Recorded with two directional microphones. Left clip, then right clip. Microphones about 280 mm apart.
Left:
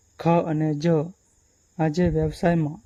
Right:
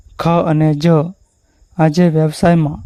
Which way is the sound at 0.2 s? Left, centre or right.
Right.